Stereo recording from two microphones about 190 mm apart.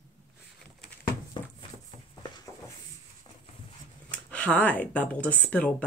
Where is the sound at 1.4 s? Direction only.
25° left (ahead or behind).